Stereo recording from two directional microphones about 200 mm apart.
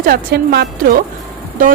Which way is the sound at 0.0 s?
50° right (ahead or behind).